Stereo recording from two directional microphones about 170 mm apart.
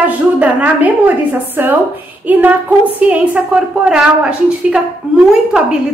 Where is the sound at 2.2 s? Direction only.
10° right (ahead or behind).